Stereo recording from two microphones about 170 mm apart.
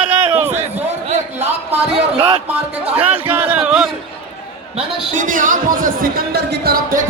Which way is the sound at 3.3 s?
10° right (ahead or behind).